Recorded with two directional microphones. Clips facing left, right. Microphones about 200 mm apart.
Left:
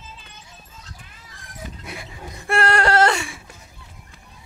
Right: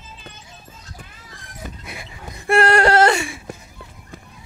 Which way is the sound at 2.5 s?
15° right (ahead or behind).